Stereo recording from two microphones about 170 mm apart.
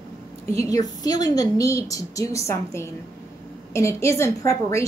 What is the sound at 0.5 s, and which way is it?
A woman's voice, 20° left (ahead or behind).